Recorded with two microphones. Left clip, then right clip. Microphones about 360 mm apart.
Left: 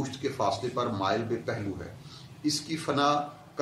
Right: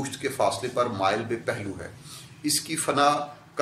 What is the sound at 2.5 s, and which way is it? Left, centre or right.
Speech, right.